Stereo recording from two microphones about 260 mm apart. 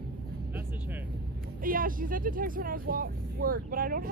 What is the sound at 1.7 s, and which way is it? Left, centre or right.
Speech, right.